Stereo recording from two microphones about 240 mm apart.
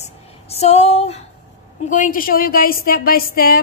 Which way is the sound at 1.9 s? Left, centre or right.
Left.